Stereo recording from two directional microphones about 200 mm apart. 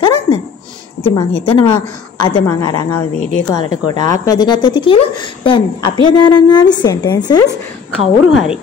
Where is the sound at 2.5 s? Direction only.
15° left (ahead or behind).